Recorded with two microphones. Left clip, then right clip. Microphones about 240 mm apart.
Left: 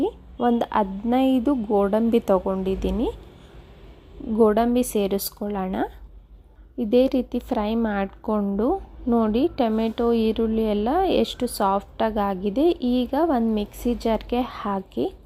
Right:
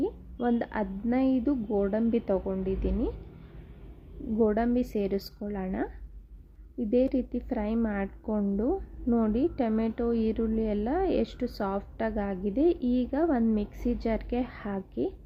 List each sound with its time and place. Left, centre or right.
0.0 s a woman's voice: centre
4.4 s a woman's voice: centre